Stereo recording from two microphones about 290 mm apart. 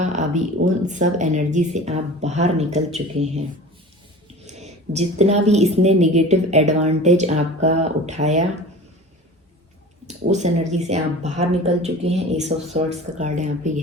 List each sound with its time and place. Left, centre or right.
0.0 s a woman's voice: right
4.4 s a woman's voice: right
10.1 s a woman's voice: right